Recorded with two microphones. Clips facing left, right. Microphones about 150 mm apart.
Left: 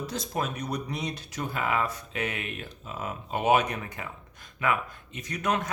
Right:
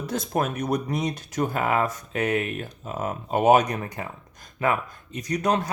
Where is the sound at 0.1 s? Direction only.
50° right (ahead or behind).